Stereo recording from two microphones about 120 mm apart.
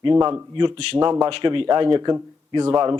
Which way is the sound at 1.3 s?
50° right (ahead or behind).